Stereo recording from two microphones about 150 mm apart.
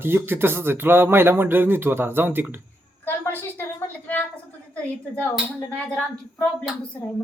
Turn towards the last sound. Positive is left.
turn(degrees=10)  # may be behind; listen again after turning